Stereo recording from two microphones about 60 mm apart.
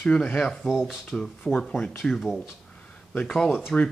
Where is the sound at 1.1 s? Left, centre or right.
Centre.